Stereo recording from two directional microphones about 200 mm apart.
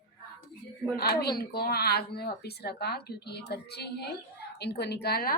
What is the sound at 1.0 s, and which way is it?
A woman's voice, 50° left (ahead or behind).